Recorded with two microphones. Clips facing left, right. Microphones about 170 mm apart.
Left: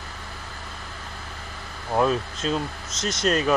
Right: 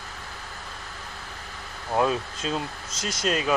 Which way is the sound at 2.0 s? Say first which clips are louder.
Left 2 dB; 10° right (ahead or behind).